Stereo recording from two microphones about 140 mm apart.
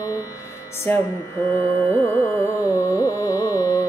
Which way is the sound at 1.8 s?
5° left (ahead or behind).